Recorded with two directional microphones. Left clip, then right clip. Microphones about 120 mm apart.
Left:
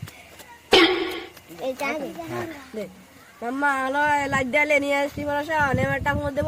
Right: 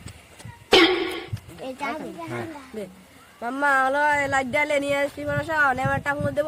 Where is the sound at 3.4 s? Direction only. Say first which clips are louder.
Right 2 dB; 35° right (ahead or behind).